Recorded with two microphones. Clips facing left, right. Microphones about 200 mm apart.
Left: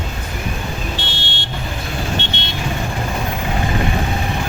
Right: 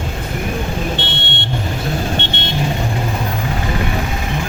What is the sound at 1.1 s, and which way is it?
Vehicle, 60° right (ahead or behind).